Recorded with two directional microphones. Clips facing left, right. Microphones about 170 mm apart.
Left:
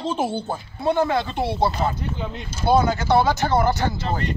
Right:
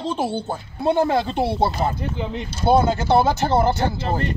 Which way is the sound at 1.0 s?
35° right (ahead or behind).